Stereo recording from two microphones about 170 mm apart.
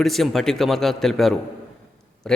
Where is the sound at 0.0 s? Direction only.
Centre (ahead or behind).